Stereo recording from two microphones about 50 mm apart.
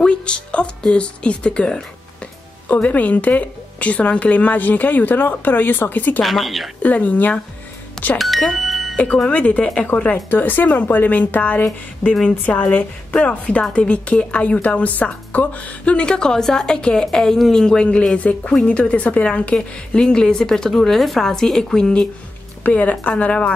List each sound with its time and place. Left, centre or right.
0.0 s speech: left
2.7 s a woman's voice: left
6.2 s speech: centre
6.8 s a woman's voice: left
8.2 s speech: centre
8.5 s music: centre
8.9 s a woman's voice: left
18.1 s speech: left
22.6 s speech: left